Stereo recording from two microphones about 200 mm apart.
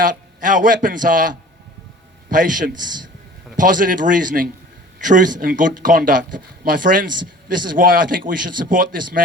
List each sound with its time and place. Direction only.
0.0 s a man's voice: 40° right (ahead or behind)